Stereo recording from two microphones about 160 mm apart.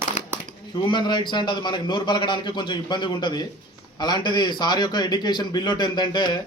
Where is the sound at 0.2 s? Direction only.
50° left (ahead or behind).